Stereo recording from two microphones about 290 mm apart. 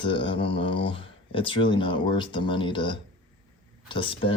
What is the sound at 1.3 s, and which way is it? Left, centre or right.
Speech, centre.